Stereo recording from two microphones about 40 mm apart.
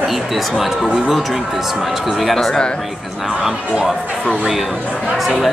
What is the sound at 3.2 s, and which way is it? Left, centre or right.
Speech, centre.